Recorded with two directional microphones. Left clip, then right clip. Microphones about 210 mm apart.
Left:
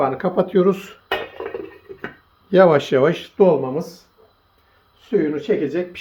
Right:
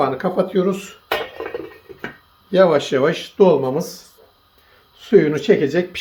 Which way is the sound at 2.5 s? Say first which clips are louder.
Left 1 dB; 35° left (ahead or behind).